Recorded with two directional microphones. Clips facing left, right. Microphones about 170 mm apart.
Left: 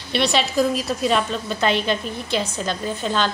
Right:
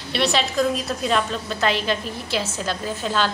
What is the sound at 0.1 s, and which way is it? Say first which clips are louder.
A woman's voice: left 2 dB; centre (ahead or behind).